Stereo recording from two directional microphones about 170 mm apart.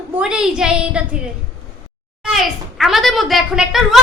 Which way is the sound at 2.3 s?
Centre (ahead or behind).